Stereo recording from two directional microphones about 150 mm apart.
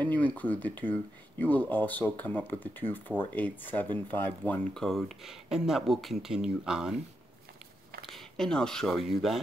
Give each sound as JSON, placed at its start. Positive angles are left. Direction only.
{"t": 0.0, "sound": "speech", "side_deg": 10}
{"t": 8.1, "sound": "speech", "side_deg": 5}